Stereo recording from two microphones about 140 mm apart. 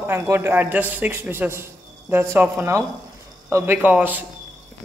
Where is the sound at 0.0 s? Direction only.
15° right (ahead or behind).